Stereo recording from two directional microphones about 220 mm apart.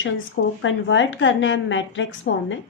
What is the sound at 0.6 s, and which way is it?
A woman's voice, 60° left (ahead or behind).